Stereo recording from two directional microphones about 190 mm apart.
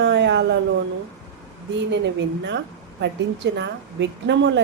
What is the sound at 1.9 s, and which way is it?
A woman's voice, 70° right (ahead or behind).